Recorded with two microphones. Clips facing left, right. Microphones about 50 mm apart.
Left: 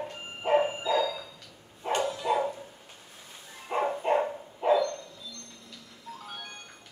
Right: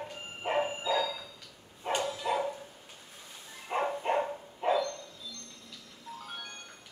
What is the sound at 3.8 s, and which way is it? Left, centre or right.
Dog, centre.